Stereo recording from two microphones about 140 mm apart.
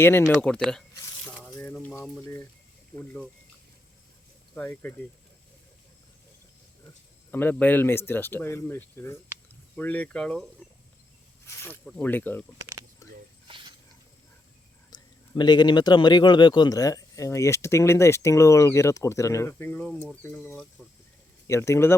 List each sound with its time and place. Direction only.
0.0 s speech: 15° left (ahead or behind)
0.4 s a sound: 5° left (ahead or behind)
1.9 s speech: 20° left (ahead or behind)
3.0 s speech: 10° left (ahead or behind)
4.5 s speech: 10° left (ahead or behind)
7.3 s speech: 15° left (ahead or behind)
13.0 s a sound: 25° left (ahead or behind)
13.5 s snake: 35° right (ahead or behind)
14.9 s a sound: 30° left (ahead or behind)
15.4 s speech: 30° left (ahead or behind); by 19.9 s 15° left (ahead or behind)
19.9 s speech: 5° left (ahead or behind)
21.4 s speech: 20° left (ahead or behind)